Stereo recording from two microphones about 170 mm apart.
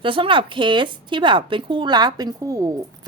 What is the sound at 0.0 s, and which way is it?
Speech, 30° right (ahead or behind).